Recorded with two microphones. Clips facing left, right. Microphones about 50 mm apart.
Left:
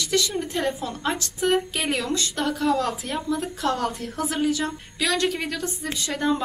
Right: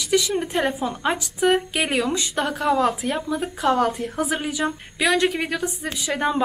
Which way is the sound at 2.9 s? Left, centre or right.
Centre.